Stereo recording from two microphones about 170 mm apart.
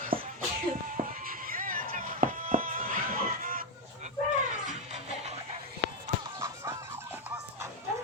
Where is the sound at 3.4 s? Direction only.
55° right (ahead or behind).